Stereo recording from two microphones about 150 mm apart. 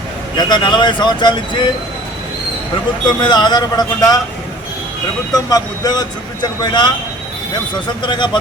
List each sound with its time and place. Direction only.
0.3 s speech: 30° left (ahead or behind)
3.2 s speech: 30° left (ahead or behind)
5.3 s speech: 25° left (ahead or behind)
8.0 s speech: 30° left (ahead or behind)